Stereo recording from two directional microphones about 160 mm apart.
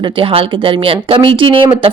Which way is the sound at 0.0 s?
35° right (ahead or behind).